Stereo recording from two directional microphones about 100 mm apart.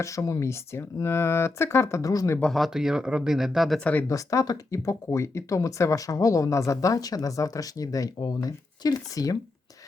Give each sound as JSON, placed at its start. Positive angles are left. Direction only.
{"t": 0.0, "sound": "speech", "side_deg": 30}
{"t": 2.4, "sound": "speech", "side_deg": 0}
{"t": 4.1, "sound": "speech", "side_deg": 35}